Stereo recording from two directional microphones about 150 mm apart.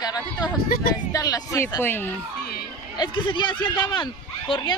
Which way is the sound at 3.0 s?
30° left (ahead or behind).